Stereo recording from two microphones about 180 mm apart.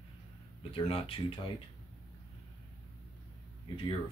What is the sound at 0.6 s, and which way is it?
Speech, 30° left (ahead or behind).